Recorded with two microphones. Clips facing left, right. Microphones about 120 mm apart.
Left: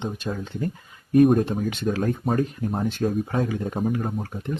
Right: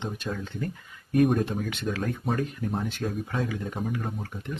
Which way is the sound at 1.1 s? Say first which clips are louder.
Left 6 dB; 40° left (ahead or behind).